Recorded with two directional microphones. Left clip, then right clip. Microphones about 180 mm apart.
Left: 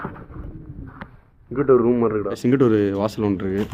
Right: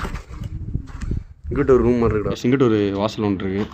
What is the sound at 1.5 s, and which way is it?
Speech, 25° right (ahead or behind).